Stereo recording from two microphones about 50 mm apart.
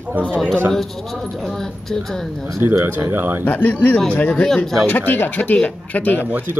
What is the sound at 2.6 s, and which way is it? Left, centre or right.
Speech, right.